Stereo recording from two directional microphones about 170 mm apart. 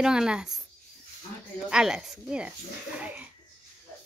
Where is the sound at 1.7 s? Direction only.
5° right (ahead or behind).